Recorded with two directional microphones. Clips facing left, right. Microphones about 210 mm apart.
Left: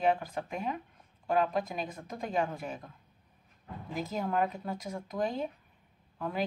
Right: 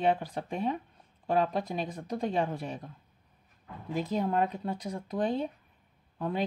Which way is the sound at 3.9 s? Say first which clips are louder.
Right 3 dB; 30° right (ahead or behind).